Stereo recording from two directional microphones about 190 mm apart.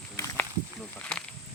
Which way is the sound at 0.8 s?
5° left (ahead or behind).